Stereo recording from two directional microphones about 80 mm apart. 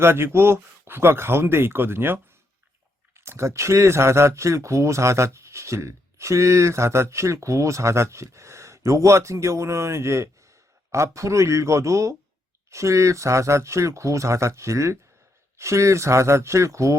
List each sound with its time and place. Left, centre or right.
0.0 s speech: right